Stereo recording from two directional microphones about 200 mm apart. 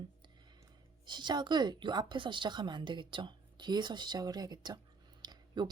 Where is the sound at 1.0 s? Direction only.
20° right (ahead or behind).